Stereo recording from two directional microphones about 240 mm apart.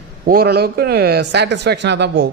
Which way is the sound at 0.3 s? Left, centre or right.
Right.